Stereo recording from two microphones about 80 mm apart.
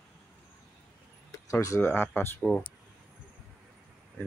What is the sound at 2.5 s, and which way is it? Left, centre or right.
Speech, centre.